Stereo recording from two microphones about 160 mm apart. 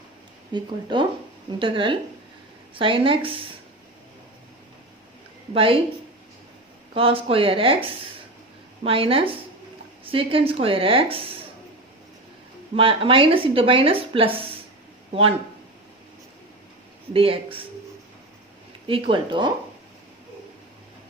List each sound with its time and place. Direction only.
0.5 s speech: 30° right (ahead or behind)
5.5 s speech: 35° right (ahead or behind)
6.9 s speech: 35° right (ahead or behind)
12.7 s speech: 35° right (ahead or behind)
17.2 s speech: 35° right (ahead or behind)
18.9 s speech: 35° right (ahead or behind)